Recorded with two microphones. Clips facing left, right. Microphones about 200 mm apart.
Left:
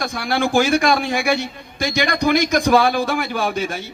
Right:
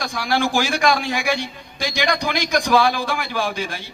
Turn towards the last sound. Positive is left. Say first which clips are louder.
# left 3 dB
turn(degrees=50)  # may be behind; listen again after turning